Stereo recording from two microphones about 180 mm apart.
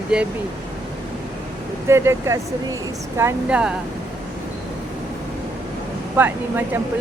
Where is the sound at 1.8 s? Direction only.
15° right (ahead or behind).